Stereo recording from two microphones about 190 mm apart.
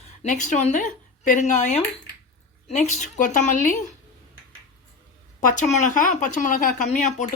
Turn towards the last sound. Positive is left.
turn(degrees=40)  # may be behind; listen again after turning